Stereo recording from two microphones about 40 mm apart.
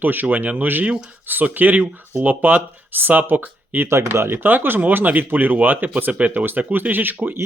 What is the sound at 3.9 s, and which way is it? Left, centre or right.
Speech, right.